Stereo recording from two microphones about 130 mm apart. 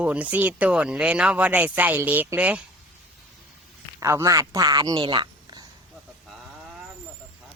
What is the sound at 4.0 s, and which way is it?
Speech, 25° right (ahead or behind).